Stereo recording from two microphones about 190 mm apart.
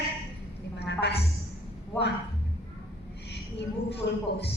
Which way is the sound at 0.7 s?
60° left (ahead or behind).